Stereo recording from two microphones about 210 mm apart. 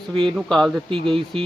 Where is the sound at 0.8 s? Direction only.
25° right (ahead or behind).